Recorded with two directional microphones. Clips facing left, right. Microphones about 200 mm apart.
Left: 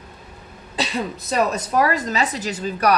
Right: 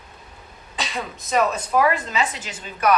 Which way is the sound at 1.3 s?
40° left (ahead or behind).